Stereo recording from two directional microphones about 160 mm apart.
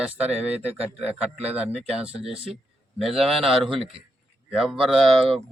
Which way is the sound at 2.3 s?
35° right (ahead or behind).